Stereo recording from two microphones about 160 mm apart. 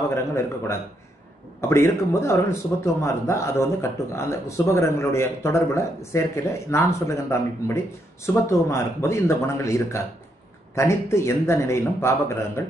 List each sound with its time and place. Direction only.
0.1 s a man's voice: 15° left (ahead or behind)